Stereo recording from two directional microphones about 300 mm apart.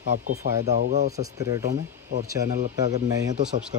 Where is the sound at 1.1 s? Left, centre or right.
Centre.